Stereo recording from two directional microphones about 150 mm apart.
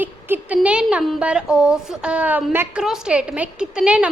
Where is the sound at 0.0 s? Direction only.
10° right (ahead or behind).